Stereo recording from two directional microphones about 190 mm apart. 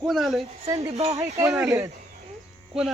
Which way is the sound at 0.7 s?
20° right (ahead or behind).